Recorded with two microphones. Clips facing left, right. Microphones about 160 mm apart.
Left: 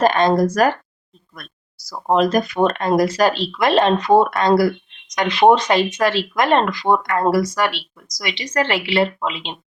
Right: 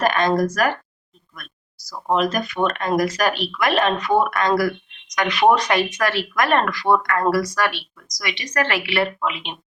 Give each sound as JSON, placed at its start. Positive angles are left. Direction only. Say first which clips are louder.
{"t": 0.0, "sound": "speech", "louder": "left 4 dB", "side_deg": 30}
{"t": 1.9, "sound": "speech", "louder": "left 4 dB", "side_deg": 40}